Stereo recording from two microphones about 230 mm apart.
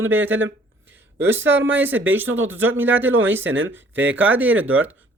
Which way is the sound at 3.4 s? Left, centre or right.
Right.